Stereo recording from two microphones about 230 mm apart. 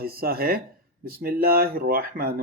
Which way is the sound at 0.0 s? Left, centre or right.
Right.